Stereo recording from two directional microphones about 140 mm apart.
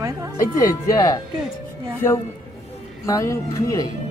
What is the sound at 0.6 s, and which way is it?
Speech, 25° left (ahead or behind).